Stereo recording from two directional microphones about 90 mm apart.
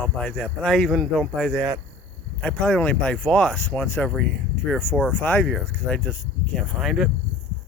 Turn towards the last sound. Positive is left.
turn(degrees=0)  # may be behind; listen again after turning